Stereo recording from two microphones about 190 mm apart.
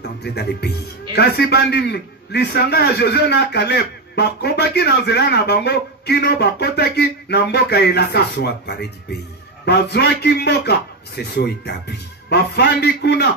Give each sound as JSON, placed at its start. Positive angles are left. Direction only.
{"t": 0.0, "sound": "a man's voice", "side_deg": 60}